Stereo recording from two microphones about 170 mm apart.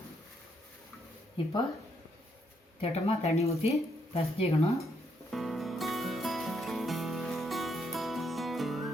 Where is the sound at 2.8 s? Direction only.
35° left (ahead or behind).